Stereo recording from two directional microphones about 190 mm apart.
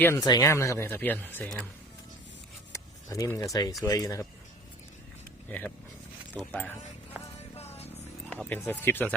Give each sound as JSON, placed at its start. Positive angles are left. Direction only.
{"t": 0.0, "sound": "speech", "side_deg": 15}
{"t": 2.7, "sound": "speech", "side_deg": 15}
{"t": 5.5, "sound": "speech", "side_deg": 10}
{"t": 7.5, "sound": "music", "side_deg": 35}
{"t": 8.3, "sound": "speech", "side_deg": 5}